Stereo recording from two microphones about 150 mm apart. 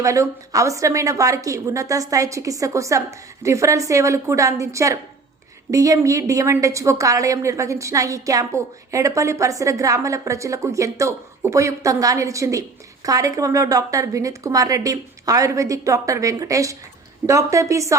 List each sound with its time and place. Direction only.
0.0 s a woman's voice: 20° right (ahead or behind)